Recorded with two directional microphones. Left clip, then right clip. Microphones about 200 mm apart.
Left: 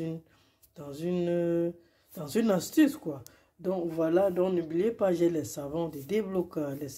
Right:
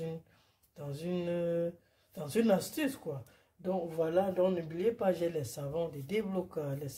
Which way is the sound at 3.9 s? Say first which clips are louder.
Left 5 dB; 35° left (ahead or behind).